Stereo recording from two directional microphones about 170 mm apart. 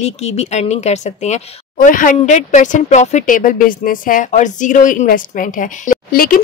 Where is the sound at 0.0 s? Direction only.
40° left (ahead or behind).